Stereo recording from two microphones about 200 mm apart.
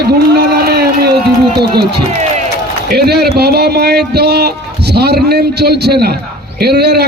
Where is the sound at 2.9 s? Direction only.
55° right (ahead or behind).